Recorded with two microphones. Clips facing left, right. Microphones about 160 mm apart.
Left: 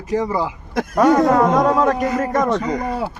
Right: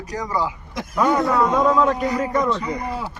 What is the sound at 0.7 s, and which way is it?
Speech, 45° left (ahead or behind).